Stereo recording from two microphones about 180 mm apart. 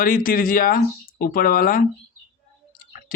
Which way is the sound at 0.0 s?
50° left (ahead or behind).